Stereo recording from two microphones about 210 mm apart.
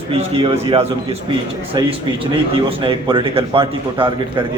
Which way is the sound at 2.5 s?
25° right (ahead or behind).